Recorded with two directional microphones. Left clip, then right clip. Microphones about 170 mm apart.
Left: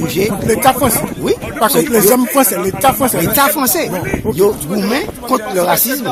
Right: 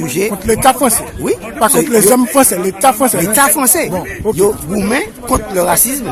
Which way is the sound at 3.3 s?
15° right (ahead or behind).